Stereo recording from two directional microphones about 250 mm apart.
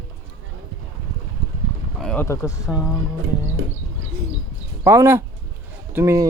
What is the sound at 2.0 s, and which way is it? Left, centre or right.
Speech, centre.